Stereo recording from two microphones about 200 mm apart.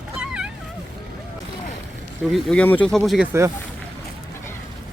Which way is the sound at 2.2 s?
Centre (ahead or behind).